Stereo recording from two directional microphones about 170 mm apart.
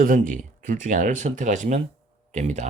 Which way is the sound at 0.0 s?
55° right (ahead or behind).